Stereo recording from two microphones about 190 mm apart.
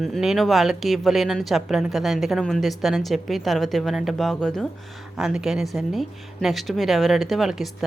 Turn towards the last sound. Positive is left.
turn(degrees=0)  # may be behind; listen again after turning